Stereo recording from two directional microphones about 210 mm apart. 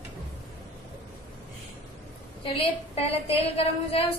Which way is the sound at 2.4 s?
25° left (ahead or behind).